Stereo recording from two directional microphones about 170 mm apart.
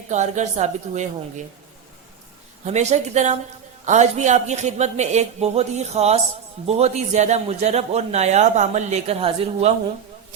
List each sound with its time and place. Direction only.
0.1 s a man's voice: 45° right (ahead or behind)
2.6 s a man's voice: 40° right (ahead or behind)